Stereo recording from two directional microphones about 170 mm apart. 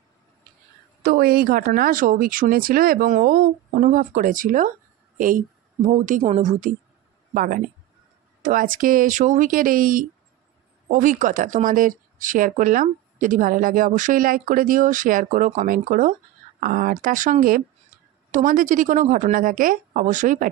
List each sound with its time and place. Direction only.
1.0 s speech: 65° right (ahead or behind)
5.9 s speech: 50° right (ahead or behind)